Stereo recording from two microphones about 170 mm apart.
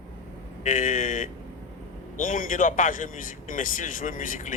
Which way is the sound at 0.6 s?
50° left (ahead or behind).